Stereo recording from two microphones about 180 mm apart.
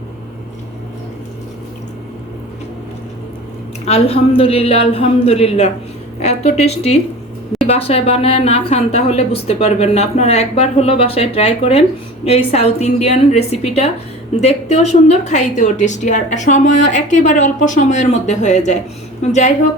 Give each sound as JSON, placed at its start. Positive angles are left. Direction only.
{"t": 3.8, "sound": "speech", "side_deg": 35}